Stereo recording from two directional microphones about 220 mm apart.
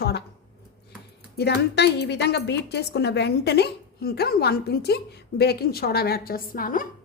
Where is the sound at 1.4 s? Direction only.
50° left (ahead or behind).